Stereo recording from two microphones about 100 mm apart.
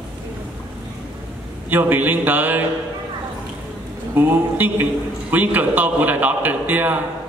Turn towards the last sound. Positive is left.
turn(degrees=-15)  # may be behind; listen again after turning